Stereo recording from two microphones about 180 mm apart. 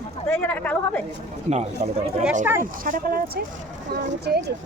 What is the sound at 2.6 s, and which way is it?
Speech, 50° right (ahead or behind).